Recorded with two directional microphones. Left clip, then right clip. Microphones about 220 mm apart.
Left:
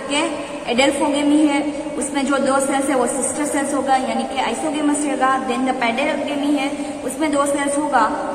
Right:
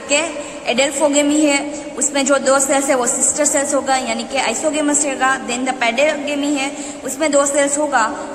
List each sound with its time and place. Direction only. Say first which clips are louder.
0.1 s a woman's voice: right 3 dB; 50° right (ahead or behind)